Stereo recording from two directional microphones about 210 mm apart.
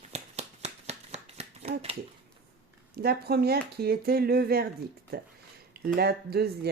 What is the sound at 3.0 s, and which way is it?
Speech, 50° right (ahead or behind).